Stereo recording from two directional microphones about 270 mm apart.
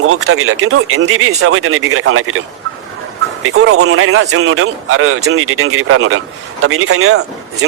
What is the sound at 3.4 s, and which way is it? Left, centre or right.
Speech, right.